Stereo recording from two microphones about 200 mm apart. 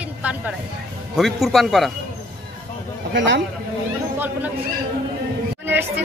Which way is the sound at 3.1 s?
65° right (ahead or behind).